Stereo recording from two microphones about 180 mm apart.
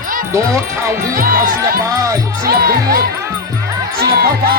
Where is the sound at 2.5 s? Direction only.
55° right (ahead or behind).